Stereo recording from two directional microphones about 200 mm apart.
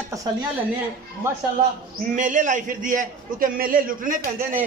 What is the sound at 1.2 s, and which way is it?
Speech, 10° right (ahead or behind).